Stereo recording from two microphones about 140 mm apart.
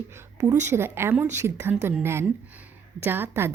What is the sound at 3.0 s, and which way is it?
Speech, 15° right (ahead or behind).